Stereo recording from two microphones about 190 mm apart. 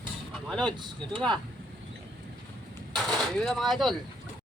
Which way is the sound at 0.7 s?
25° right (ahead or behind).